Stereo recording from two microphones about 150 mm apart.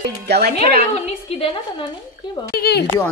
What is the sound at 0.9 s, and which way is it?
Speech, 40° left (ahead or behind).